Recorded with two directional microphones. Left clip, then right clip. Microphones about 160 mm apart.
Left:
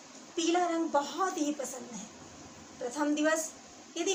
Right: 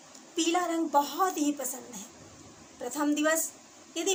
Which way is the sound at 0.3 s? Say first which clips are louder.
Right 1 dB; 90° right.